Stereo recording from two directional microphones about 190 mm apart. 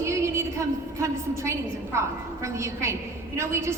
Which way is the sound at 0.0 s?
15° right (ahead or behind).